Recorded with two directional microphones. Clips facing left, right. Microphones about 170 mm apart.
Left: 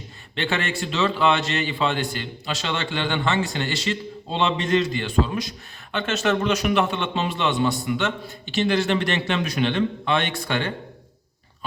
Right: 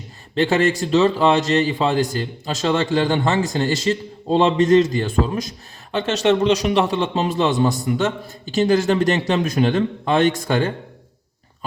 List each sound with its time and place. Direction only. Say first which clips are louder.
0.3 s a man's voice: right 9 dB; 40° right (ahead or behind)